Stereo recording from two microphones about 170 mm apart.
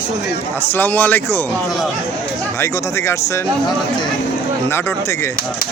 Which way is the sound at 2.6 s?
15° left (ahead or behind).